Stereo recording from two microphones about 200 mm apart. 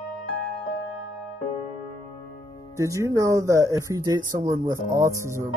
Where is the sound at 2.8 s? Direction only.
15° right (ahead or behind).